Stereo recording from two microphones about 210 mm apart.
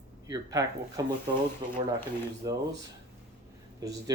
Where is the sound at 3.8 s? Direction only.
15° right (ahead or behind).